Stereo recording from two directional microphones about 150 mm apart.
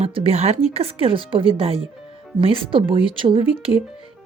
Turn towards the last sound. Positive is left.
turn(degrees=-40)  # may be behind; listen again after turning